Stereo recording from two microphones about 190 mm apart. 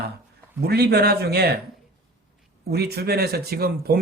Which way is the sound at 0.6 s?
55° right (ahead or behind).